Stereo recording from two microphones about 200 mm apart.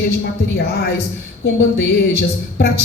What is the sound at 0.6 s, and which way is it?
A woman's voice, 55° left (ahead or behind).